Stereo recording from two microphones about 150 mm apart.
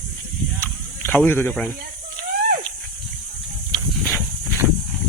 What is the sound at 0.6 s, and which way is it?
Snake, 15° left (ahead or behind).